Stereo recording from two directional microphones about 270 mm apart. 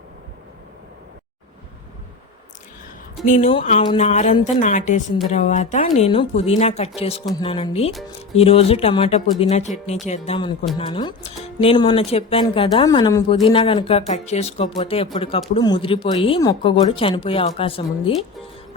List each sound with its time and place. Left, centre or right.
3.2 s speech: left